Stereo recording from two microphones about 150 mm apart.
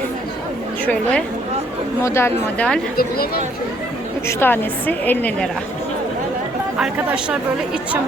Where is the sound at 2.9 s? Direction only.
90° left.